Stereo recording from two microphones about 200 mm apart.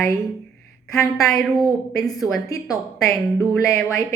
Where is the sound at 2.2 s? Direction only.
15° left (ahead or behind).